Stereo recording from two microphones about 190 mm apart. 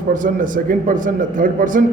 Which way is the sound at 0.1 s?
45° right (ahead or behind).